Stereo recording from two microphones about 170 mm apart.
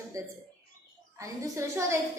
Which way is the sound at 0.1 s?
20° right (ahead or behind).